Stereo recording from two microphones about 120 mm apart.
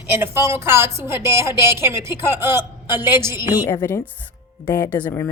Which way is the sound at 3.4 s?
35° left (ahead or behind).